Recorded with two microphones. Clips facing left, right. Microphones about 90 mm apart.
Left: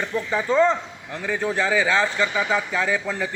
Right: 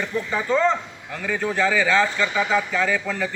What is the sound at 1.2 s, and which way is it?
Speech, 25° left (ahead or behind).